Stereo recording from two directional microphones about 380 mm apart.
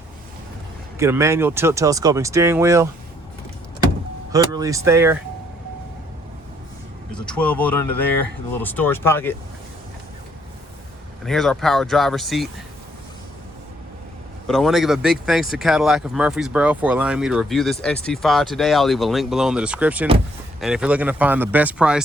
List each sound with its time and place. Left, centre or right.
0.9 s speech: centre
4.3 s speech: centre
7.1 s speech: centre
11.3 s speech: centre
14.4 s speech: centre